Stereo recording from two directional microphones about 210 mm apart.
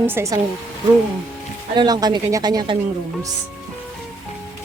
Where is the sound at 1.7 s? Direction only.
20° right (ahead or behind).